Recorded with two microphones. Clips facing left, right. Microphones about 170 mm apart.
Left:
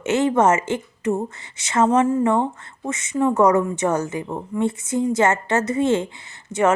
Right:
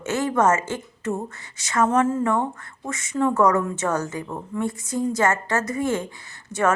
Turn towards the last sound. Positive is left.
turn(degrees=20)  # may be behind; listen again after turning